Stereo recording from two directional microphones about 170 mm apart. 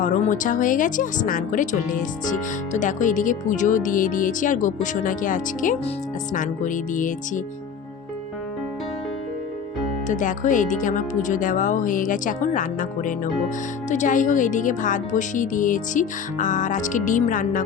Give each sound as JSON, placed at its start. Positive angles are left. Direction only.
{"t": 0.0, "sound": "a woman's voice", "side_deg": 50}
{"t": 10.1, "sound": "a woman's voice", "side_deg": 50}